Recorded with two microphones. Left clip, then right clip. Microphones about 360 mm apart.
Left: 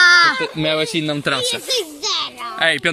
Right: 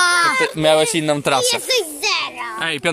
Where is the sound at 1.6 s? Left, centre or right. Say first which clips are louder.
Right 3 dB; right.